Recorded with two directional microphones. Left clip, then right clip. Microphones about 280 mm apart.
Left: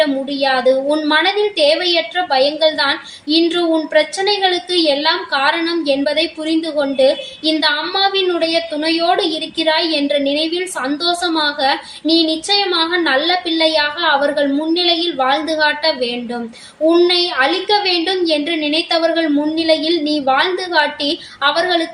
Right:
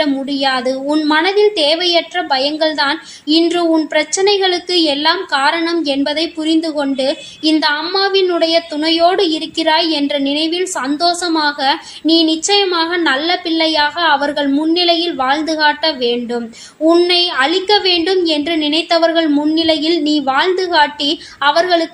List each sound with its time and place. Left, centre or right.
0.0 s a woman's voice: right